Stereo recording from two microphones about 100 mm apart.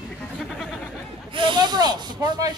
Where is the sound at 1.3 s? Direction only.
50° right (ahead or behind).